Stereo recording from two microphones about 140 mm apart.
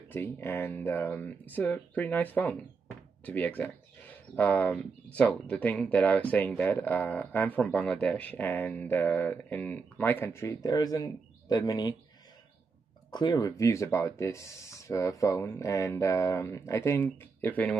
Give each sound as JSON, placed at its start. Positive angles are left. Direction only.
{"t": 0.1, "sound": "speech", "side_deg": 15}
{"t": 13.1, "sound": "speech", "side_deg": 30}